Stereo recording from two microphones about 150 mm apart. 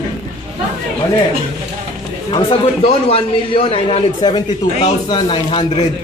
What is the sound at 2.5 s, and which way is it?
Speech, 40° left (ahead or behind).